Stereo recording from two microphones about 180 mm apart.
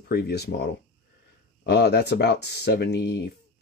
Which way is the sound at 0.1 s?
65° left (ahead or behind).